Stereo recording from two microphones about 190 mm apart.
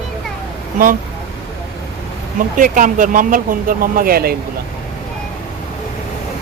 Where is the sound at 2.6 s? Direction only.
45° right (ahead or behind).